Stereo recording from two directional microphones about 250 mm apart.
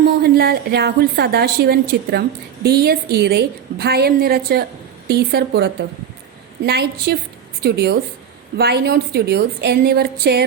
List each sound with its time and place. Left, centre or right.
0.0 s a woman's voice: right